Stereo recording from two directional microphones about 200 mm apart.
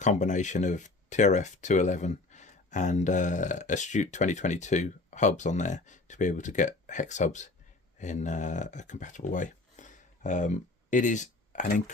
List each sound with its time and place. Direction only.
0.0 s speech: 35° left (ahead or behind)